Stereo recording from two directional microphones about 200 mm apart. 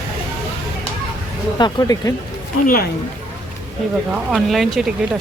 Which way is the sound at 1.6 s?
20° left (ahead or behind).